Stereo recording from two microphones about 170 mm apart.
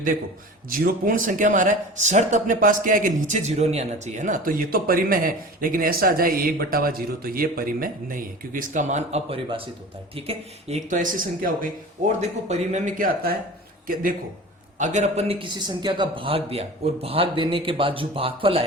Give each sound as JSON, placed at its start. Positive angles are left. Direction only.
{"t": 0.7, "sound": "a man's voice", "side_deg": -55}
{"t": 14.8, "sound": "a man's voice", "side_deg": -45}